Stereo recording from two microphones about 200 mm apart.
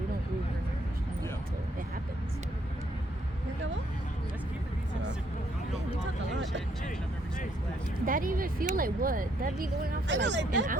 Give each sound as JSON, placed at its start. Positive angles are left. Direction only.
{"t": 8.0, "sound": "speech", "side_deg": -45}
{"t": 10.1, "sound": "speech", "side_deg": -65}